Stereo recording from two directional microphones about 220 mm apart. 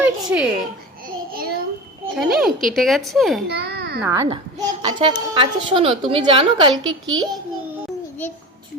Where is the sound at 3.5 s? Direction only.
45° right (ahead or behind).